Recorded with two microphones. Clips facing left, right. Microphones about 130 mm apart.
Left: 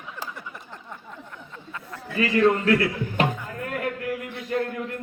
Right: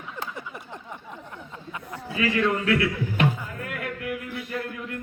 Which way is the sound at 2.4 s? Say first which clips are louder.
Left 5 dB; 40° left (ahead or behind).